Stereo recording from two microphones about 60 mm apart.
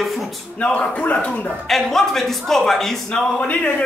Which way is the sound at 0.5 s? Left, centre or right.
Left.